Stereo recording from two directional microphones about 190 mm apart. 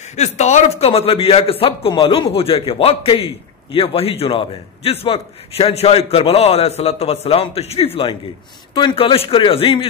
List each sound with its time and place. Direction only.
0.1 s a man's voice: 35° left (ahead or behind)